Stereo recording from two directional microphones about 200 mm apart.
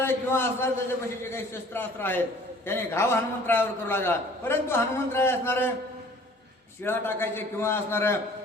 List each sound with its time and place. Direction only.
0.0 s a man's voice: 10° left (ahead or behind)
6.8 s a man's voice: 10° left (ahead or behind)